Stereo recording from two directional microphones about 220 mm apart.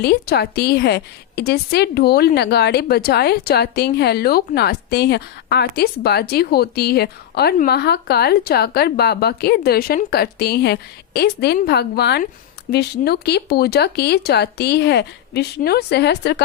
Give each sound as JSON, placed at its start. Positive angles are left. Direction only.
{"t": 0.0, "sound": "a woman's voice", "side_deg": 45}